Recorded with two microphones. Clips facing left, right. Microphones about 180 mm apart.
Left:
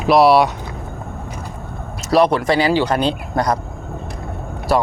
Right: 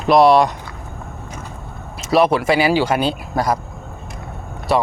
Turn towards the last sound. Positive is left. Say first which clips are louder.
# even
turn(degrees=0)  # may be behind; listen again after turning